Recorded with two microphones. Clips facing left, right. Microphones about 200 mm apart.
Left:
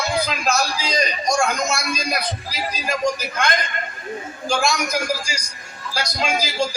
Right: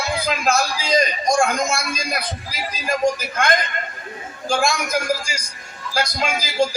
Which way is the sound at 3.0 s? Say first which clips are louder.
Right 3 dB; 55° right (ahead or behind).